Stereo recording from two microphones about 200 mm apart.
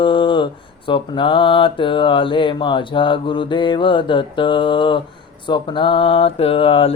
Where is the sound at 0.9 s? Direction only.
25° left (ahead or behind).